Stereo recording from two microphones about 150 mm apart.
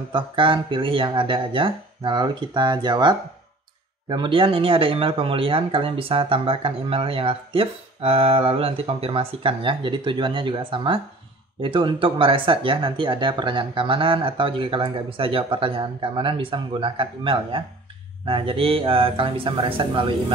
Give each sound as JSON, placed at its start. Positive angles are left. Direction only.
{"t": 0.1, "sound": "speech", "side_deg": -35}